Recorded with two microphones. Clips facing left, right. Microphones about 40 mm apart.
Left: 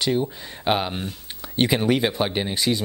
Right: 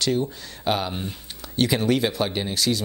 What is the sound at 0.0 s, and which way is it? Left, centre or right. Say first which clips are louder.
Speech: left 1 dB; centre.